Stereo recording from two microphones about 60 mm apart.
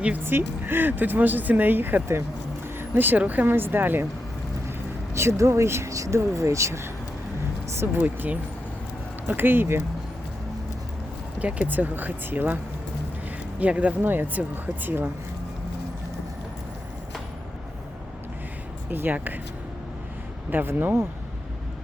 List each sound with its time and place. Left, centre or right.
0.3 s speech: right
5.1 s speech: right
8.0 s speech: right
11.3 s speech: right
13.6 s speech: right
14.0 s speech: right
18.9 s speech: right
20.5 s speech: right